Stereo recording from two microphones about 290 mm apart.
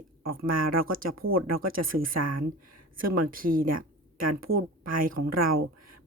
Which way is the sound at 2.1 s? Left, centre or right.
Right.